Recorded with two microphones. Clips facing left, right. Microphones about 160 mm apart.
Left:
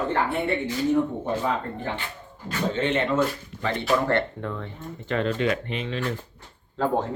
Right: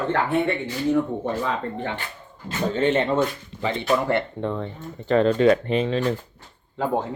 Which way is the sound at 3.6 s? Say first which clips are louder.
Right 2 dB; 15° right (ahead or behind).